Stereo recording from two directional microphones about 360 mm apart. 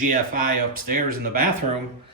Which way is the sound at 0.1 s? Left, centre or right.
Right.